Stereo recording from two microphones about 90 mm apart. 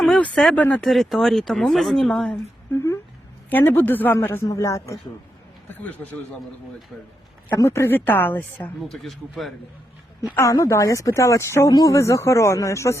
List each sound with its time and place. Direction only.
0.5 s speech: 15° left (ahead or behind)
0.9 s speech: centre (ahead or behind)
2.7 s speech: 35° left (ahead or behind)
3.5 s a woman's voice: 20° left (ahead or behind)
4.4 s speech: 35° left (ahead or behind)
5.6 s a woman's voice: 20° left (ahead or behind)
7.5 s a woman's voice: 30° left (ahead or behind)
8.8 s speech: centre (ahead or behind)
10.3 s speech: 35° left (ahead or behind)